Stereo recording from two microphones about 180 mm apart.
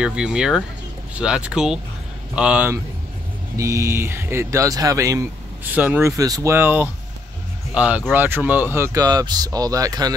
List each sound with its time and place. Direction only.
0.0 s speech: 5° right (ahead or behind); by 10.1 s 20° right (ahead or behind)